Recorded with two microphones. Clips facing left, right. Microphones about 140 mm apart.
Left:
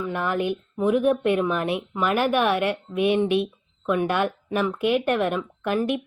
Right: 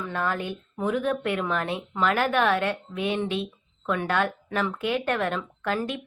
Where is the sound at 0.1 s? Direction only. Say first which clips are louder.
Left 3 dB; 15° left (ahead or behind).